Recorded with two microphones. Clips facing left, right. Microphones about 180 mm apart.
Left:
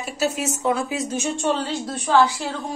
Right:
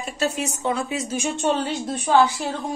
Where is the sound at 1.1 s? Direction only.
15° right (ahead or behind).